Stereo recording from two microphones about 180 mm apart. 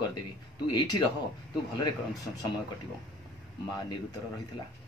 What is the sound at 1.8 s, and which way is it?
Speech, 20° left (ahead or behind).